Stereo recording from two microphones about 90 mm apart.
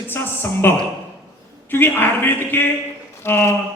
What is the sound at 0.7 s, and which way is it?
Speech, 25° left (ahead or behind).